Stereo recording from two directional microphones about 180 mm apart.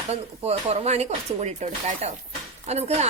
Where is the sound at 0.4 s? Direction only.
35° right (ahead or behind).